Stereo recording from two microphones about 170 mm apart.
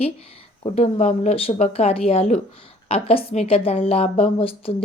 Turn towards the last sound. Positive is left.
turn(degrees=35)  # may be behind; listen again after turning